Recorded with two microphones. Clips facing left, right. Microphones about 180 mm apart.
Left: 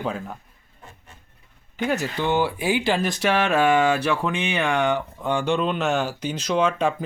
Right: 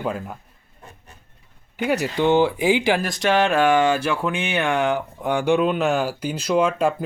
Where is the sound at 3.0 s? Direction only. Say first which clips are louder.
Right 2 dB; 5° left (ahead or behind).